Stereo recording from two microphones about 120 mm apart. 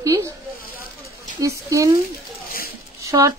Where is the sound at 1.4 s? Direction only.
25° right (ahead or behind).